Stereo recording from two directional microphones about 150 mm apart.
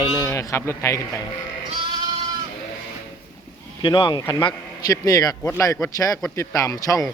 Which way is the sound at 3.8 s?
30° left (ahead or behind).